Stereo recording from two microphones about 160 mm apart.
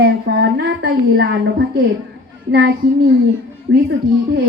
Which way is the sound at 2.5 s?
90° right.